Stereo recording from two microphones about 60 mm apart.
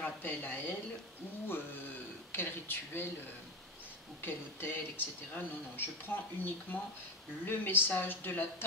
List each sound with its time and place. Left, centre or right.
0.0 s a woman's voice: left
2.3 s speech: left
4.2 s speech: left